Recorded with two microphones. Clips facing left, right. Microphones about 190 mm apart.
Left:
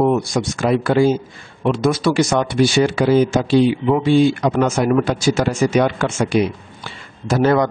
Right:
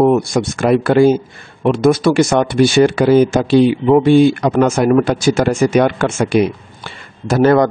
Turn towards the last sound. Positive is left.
turn(degrees=-55)  # may be behind; listen again after turning